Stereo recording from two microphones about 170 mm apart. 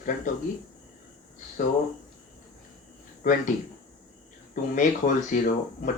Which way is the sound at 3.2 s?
50° left (ahead or behind).